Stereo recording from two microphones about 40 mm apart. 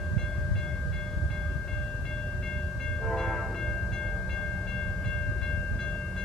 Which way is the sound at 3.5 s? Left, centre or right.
Centre.